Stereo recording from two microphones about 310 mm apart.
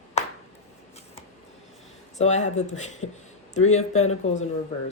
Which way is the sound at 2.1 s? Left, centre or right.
Left.